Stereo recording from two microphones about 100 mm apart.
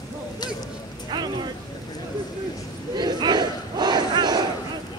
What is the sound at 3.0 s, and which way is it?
Battle cry, 45° right (ahead or behind).